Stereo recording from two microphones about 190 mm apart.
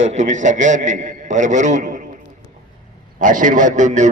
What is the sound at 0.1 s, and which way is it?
A man's voice, 40° right (ahead or behind).